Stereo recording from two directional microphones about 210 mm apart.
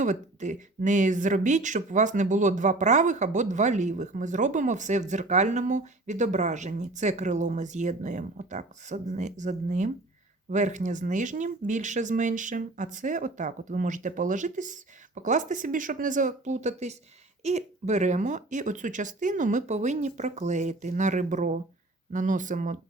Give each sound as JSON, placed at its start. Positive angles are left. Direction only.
{"t": 0.0, "sound": "speech", "side_deg": -35}